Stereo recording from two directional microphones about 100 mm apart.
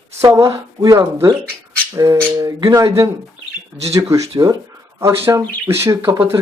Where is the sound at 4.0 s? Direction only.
30° right (ahead or behind).